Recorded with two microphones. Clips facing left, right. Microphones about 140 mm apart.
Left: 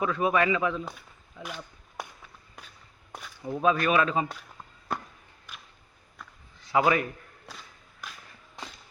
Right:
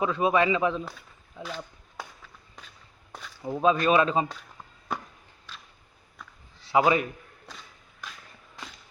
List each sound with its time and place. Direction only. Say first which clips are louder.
0.0 s speech: right 2 dB; 20° right (ahead or behind)
1.4 s run: right 3 dB; 10° left (ahead or behind)
3.4 s speech: right 2 dB; 25° right (ahead or behind)
6.7 s speech: right 2 dB; 20° right (ahead or behind)
7.5 s walk: even; 10° left (ahead or behind)